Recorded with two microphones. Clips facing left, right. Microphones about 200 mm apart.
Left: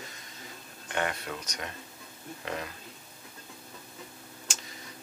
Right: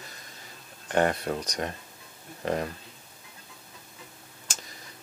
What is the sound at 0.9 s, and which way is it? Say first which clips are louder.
Speech: right 8 dB; 40° right (ahead or behind).